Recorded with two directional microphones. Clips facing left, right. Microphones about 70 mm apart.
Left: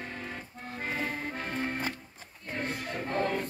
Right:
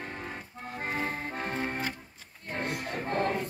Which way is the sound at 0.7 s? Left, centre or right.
Right.